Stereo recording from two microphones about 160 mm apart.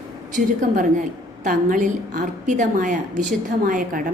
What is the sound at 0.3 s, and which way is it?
A woman's voice, 50° right (ahead or behind).